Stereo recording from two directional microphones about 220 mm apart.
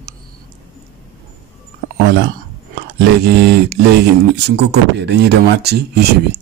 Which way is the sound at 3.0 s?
50° right (ahead or behind).